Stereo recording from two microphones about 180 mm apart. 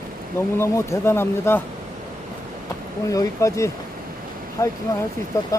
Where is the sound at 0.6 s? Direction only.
15° left (ahead or behind).